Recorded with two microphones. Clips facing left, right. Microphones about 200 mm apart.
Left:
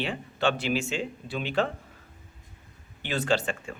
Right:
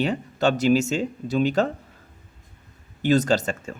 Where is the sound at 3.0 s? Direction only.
40° right (ahead or behind).